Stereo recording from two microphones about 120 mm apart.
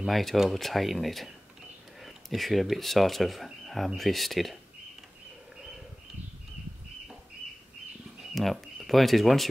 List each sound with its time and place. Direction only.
0.0 s speech: centre (ahead or behind)
8.4 s speech: centre (ahead or behind)